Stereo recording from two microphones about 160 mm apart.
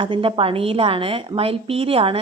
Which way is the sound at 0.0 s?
30° right (ahead or behind).